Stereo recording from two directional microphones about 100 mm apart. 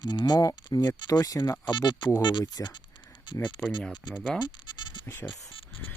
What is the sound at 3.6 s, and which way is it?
Speech, 10° left (ahead or behind).